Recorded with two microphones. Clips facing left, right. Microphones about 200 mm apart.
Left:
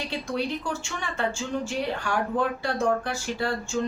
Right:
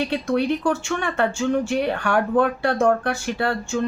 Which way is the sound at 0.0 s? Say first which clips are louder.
Right 8 dB; 60° right (ahead or behind).